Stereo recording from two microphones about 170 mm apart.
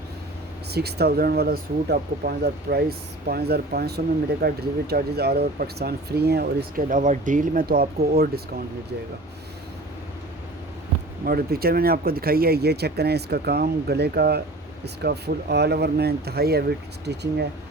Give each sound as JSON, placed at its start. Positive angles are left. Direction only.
{"t": 0.7, "sound": "speech", "side_deg": -70}
{"t": 11.3, "sound": "speech", "side_deg": -65}